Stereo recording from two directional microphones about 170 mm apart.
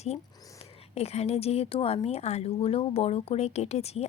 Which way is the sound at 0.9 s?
40° left (ahead or behind).